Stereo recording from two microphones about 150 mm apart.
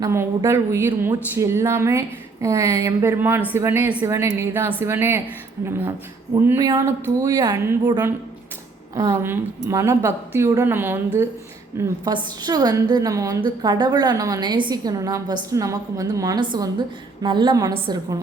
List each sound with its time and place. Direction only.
0.0 s a woman's voice: 20° right (ahead or behind)
11.8 s a woman's voice: 30° right (ahead or behind)